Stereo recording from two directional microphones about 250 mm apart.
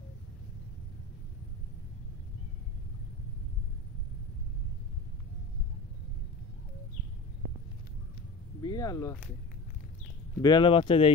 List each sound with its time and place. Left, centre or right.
8.6 s speech: centre
10.4 s speech: centre